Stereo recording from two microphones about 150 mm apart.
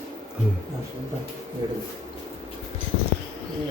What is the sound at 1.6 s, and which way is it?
Speech, 30° right (ahead or behind).